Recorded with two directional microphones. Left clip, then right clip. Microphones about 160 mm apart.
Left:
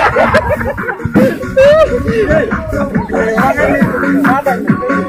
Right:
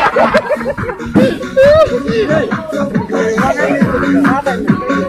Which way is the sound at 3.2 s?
25° left (ahead or behind).